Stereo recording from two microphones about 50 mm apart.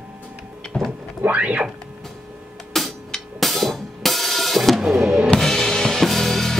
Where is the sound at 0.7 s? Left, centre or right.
Centre.